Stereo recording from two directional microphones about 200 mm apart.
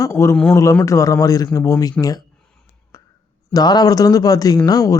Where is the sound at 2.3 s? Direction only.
5° left (ahead or behind).